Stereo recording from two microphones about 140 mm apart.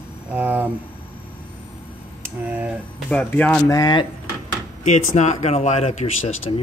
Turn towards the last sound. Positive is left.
turn(degrees=50)  # may be behind; listen again after turning